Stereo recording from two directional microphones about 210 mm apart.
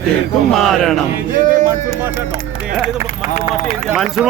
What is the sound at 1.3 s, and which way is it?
Music, 35° right (ahead or behind).